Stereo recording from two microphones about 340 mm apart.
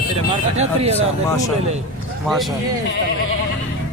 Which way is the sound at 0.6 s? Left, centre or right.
Centre.